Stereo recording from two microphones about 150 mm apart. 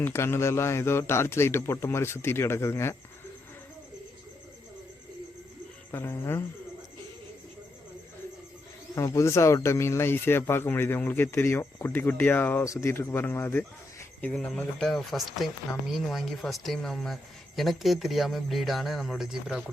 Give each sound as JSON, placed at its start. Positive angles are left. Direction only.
{"t": 0.0, "sound": "speech", "side_deg": 15}
{"t": 5.9, "sound": "speech", "side_deg": 15}
{"t": 9.0, "sound": "speech", "side_deg": 20}